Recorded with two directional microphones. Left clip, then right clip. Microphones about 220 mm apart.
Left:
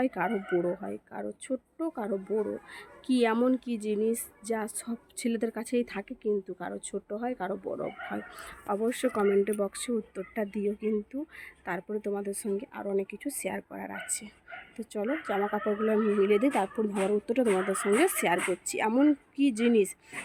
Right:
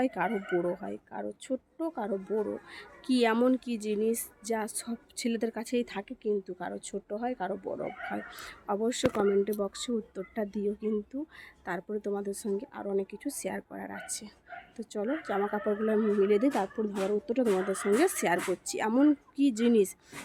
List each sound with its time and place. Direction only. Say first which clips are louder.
0.0 s speech: even; centre (ahead or behind)